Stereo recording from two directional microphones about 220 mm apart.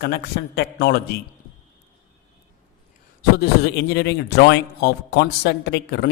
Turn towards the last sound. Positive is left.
turn(degrees=50)  # may be behind; listen again after turning